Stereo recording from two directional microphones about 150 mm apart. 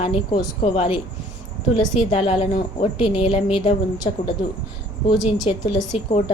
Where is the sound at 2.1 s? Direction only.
40° left (ahead or behind).